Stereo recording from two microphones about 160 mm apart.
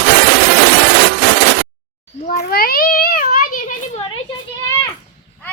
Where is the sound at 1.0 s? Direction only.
85° right.